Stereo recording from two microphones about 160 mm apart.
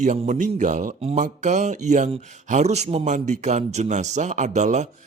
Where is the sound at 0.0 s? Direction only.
50° right (ahead or behind).